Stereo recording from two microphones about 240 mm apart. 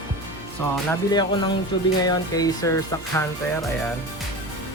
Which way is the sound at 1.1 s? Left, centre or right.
Centre.